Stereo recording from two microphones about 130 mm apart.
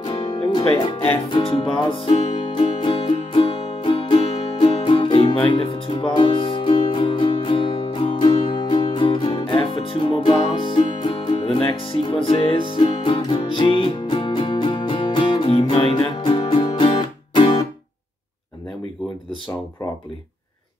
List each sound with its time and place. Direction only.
0.0 s music: 40° left (ahead or behind)